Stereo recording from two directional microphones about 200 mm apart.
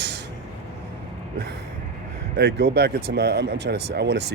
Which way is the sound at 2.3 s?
55° right (ahead or behind).